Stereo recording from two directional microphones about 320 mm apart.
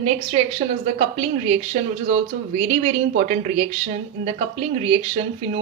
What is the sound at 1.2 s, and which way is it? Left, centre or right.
Speech, centre.